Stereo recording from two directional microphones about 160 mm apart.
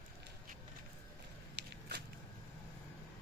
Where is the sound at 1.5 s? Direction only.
90° right.